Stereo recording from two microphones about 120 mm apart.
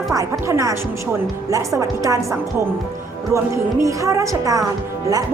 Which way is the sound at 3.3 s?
25° right (ahead or behind).